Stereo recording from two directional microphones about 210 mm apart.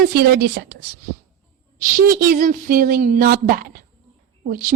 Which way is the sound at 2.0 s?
40° right (ahead or behind).